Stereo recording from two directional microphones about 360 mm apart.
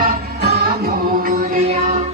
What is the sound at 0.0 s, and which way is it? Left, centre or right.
Music, right.